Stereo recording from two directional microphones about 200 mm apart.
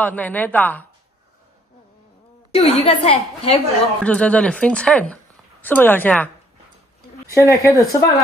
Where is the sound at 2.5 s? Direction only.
30° left (ahead or behind).